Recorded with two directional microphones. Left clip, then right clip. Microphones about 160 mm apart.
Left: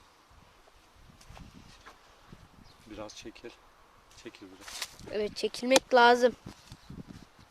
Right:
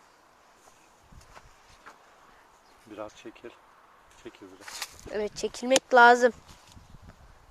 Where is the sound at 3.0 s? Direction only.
40° left (ahead or behind).